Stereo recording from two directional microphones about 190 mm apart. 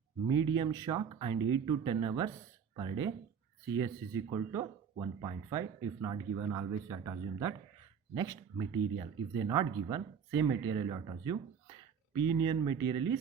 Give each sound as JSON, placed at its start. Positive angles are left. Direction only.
{"t": 0.3, "sound": "speech", "side_deg": -25}